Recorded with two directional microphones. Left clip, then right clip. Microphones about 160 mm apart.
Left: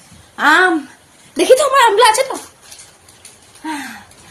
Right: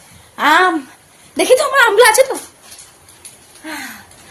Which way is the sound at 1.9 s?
35° right (ahead or behind).